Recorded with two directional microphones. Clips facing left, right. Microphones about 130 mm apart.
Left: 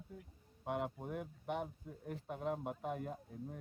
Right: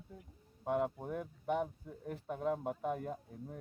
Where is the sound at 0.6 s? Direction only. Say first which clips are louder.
Right 5 dB; 45° right (ahead or behind).